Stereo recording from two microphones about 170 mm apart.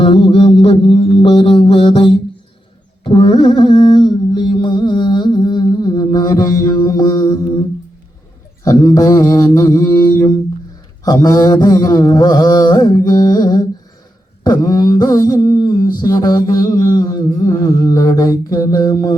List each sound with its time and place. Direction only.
0.0 s mantra: 35° left (ahead or behind); by 7.6 s 20° left (ahead or behind)
8.6 s mantra: 20° left (ahead or behind)